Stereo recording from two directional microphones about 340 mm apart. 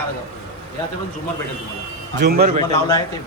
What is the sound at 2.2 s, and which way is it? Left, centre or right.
Speech, right.